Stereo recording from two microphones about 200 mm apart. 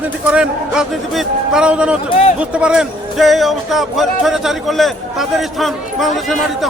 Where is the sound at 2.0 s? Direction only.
30° left (ahead or behind).